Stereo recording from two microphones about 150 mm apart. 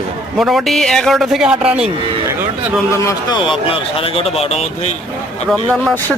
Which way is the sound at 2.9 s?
20° left (ahead or behind).